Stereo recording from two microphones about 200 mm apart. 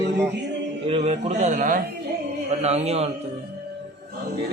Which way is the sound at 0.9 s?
30° right (ahead or behind).